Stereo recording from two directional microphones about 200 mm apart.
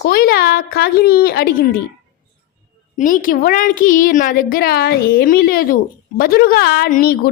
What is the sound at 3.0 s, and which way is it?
A woman's voice, 40° left (ahead or behind).